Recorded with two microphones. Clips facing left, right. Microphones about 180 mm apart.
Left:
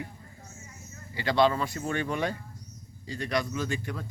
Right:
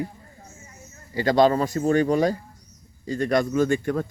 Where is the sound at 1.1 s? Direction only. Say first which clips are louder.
Right 6 dB; 40° right (ahead or behind).